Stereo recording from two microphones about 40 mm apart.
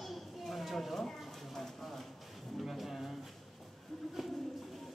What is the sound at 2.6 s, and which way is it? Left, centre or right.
Speech, centre.